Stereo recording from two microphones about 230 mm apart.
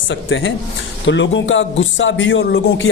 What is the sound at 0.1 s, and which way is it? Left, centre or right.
A man's voice, left.